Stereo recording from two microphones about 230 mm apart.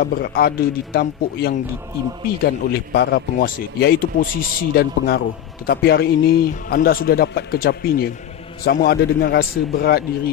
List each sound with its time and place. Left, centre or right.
0.0 s a man's voice: left